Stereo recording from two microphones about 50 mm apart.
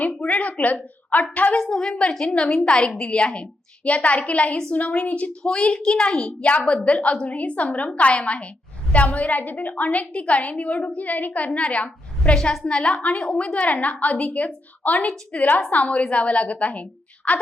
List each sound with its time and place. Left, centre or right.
0.2 s a woman's voice: left
1.5 s a woman's voice: centre; by 5.3 s left
5.4 s a woman's voice: centre